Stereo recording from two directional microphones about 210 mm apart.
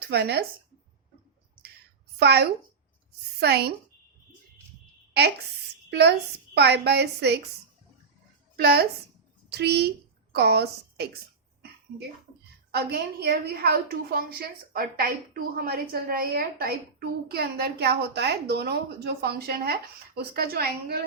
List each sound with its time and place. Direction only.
0.1 s a woman's voice: 50° right (ahead or behind)
2.1 s a woman's voice: 50° right (ahead or behind)
5.9 s a woman's voice: 55° right (ahead or behind)
8.5 s a woman's voice: 45° right (ahead or behind)
12.7 s a woman's voice: 50° right (ahead or behind)